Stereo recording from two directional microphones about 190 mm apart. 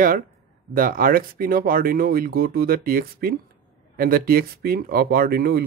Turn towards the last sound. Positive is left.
turn(degrees=-55)  # may be behind; listen again after turning